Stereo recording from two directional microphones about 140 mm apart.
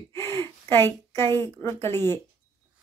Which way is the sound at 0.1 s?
20° left (ahead or behind).